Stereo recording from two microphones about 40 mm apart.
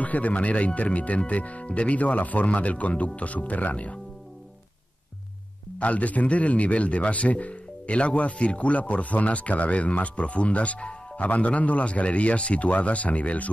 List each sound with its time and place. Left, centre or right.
0.0 s speech: left
5.8 s speech: left